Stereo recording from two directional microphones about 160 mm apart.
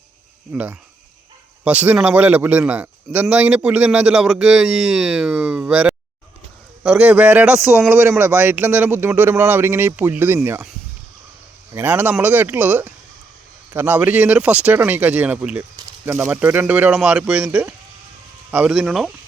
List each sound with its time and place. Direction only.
0.5 s a man's voice: 10° right (ahead or behind)
11.7 s a man's voice: 15° right (ahead or behind)
15.7 s a sound: 20° right (ahead or behind)
16.3 s a man's voice: 10° right (ahead or behind)